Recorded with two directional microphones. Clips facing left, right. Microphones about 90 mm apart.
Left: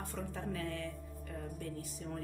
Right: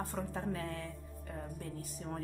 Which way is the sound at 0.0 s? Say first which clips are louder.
Right 3 dB; 35° right (ahead or behind).